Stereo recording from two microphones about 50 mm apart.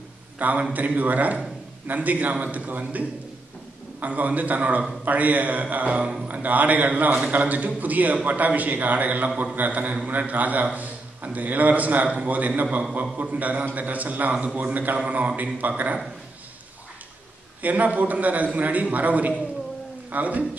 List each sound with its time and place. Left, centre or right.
0.4 s a man's voice: right
17.6 s a man's voice: right